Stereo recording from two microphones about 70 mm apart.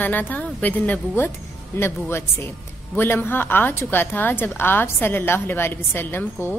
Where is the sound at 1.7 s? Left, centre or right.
Left.